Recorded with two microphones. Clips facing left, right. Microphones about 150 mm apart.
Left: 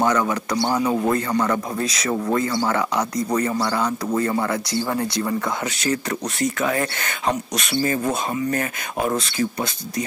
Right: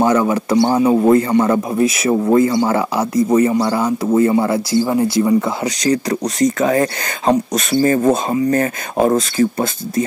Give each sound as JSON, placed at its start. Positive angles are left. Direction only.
{"t": 0.0, "sound": "a man's voice", "side_deg": -25}
{"t": 5.8, "sound": "speech", "side_deg": -35}
{"t": 7.8, "sound": "speech", "side_deg": -45}
{"t": 8.1, "sound": "speech", "side_deg": -30}
{"t": 9.4, "sound": "speech", "side_deg": -50}